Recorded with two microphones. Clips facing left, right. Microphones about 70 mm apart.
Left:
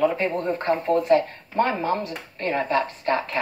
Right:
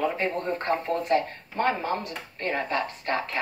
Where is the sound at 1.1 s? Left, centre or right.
Left.